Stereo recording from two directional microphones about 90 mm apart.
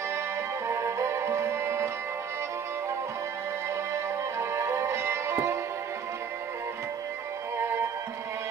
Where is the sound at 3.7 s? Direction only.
30° right (ahead or behind).